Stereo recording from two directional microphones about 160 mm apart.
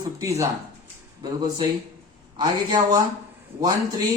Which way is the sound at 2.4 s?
25° right (ahead or behind).